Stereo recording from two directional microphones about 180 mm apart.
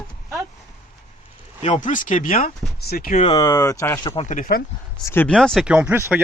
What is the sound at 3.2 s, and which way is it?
Speech, 25° left (ahead or behind).